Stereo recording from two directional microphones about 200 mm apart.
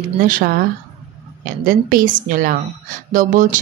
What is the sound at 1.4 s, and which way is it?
A woman's voice, 45° right (ahead or behind).